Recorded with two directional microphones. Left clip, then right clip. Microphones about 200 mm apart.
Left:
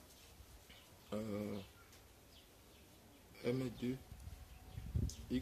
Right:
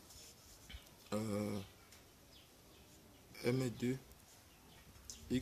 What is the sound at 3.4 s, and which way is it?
Speech, 25° right (ahead or behind).